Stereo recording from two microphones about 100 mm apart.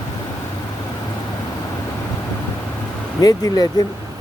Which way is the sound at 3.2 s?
40° left (ahead or behind).